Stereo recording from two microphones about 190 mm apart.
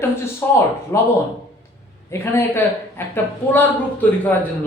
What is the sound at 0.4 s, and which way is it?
Speech, 10° left (ahead or behind).